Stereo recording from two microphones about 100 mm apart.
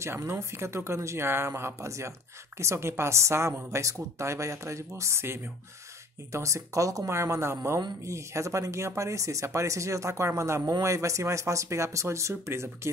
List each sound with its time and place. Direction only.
0.0 s speech: 25° right (ahead or behind)